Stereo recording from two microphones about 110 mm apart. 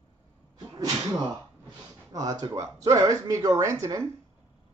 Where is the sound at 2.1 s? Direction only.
40° right (ahead or behind).